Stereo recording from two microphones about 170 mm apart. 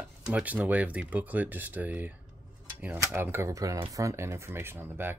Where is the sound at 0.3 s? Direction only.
10° right (ahead or behind).